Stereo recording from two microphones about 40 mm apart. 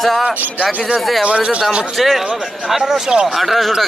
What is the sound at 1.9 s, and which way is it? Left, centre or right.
Speech, centre.